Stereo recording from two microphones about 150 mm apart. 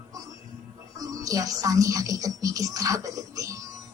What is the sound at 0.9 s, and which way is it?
Speech, 25° right (ahead or behind).